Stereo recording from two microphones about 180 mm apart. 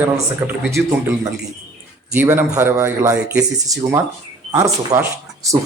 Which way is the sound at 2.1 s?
10° right (ahead or behind).